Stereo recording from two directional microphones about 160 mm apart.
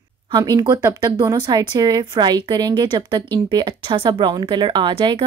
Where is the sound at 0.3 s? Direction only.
25° right (ahead or behind).